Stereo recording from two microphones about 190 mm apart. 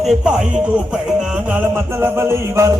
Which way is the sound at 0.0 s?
Centre (ahead or behind).